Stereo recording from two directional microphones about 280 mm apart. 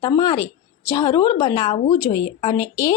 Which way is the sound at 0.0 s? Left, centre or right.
Centre.